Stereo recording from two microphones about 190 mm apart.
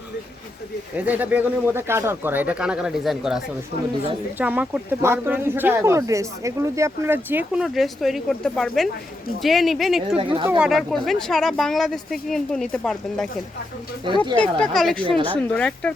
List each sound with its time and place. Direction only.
0.9 s speech: 10° right (ahead or behind)
10.2 s speech: 25° right (ahead or behind)
10.6 s speech: centre (ahead or behind)
14.3 s speech: 5° left (ahead or behind)